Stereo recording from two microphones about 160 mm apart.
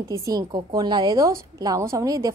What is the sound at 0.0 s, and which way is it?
Speech, 20° right (ahead or behind).